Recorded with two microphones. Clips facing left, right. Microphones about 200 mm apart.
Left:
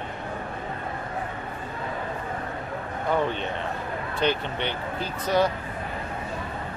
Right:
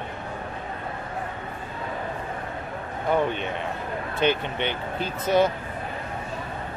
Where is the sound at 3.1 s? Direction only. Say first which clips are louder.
Right 2 dB; 15° right (ahead or behind).